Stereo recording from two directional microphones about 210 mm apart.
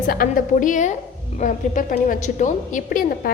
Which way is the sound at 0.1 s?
40° left (ahead or behind).